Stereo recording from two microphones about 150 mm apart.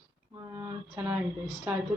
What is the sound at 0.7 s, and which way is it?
Speech, 25° right (ahead or behind).